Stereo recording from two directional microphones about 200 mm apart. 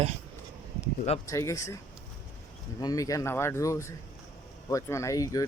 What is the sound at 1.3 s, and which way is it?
Speech, 15° left (ahead or behind).